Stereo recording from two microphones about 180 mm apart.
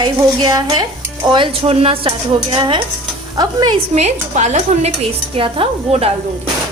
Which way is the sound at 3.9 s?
40° right (ahead or behind).